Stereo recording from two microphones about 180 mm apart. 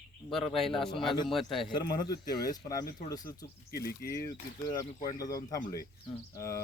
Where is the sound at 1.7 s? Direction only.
20° left (ahead or behind).